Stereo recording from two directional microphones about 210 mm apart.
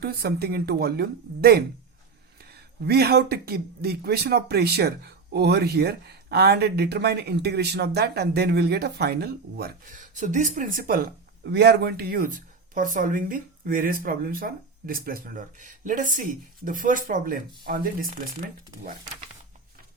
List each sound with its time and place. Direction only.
0.0 s speech: 50° right (ahead or behind)
2.8 s speech: 50° right (ahead or behind)